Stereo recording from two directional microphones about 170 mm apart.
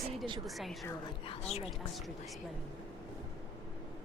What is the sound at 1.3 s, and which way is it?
Speech, 40° left (ahead or behind).